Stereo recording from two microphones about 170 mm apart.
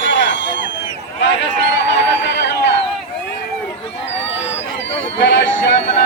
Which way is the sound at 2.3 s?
90° left.